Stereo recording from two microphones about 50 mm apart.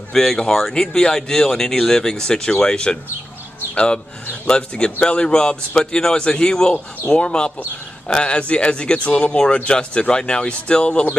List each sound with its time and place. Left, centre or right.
0.1 s speech: centre